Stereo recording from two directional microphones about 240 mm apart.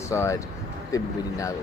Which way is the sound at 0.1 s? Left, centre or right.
Centre.